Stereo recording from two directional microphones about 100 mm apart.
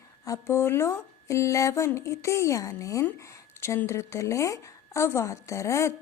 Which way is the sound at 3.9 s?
30° left (ahead or behind).